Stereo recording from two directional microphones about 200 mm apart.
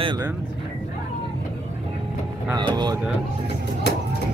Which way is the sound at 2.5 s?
20° right (ahead or behind).